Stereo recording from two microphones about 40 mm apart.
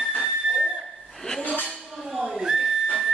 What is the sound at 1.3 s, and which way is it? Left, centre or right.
Dishes, left.